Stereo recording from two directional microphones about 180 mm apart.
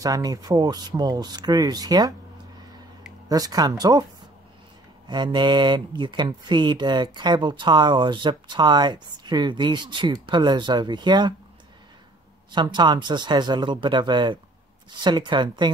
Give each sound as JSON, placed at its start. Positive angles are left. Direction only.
{"t": 0.0, "sound": "speech", "side_deg": -20}
{"t": 3.3, "sound": "speech", "side_deg": -20}
{"t": 5.0, "sound": "speech", "side_deg": -25}
{"t": 12.4, "sound": "speech", "side_deg": -25}